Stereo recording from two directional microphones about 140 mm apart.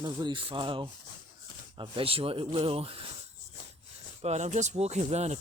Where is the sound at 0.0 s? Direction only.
30° right (ahead or behind).